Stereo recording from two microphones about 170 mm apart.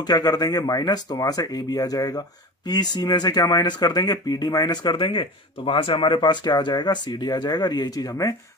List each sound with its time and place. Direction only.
0.0 s speech: 25° left (ahead or behind)